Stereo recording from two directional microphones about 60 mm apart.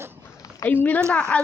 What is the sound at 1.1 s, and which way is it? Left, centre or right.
Speech, left.